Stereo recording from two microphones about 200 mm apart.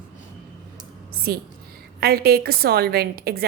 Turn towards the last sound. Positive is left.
turn(degrees=-50)  # may be behind; listen again after turning